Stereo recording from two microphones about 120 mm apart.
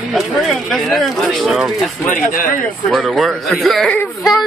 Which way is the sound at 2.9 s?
Centre (ahead or behind).